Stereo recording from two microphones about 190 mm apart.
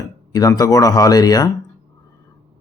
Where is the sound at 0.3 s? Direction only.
20° left (ahead or behind).